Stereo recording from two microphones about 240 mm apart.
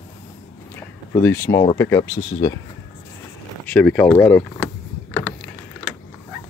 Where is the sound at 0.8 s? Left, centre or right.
Centre.